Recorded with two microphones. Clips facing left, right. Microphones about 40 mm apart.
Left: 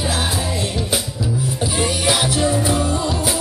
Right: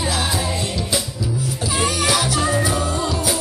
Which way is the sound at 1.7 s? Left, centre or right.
Right.